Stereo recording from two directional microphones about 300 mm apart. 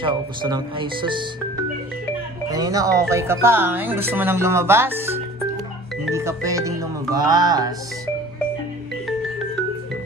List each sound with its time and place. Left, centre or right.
0.0 s music: centre
2.5 s music: centre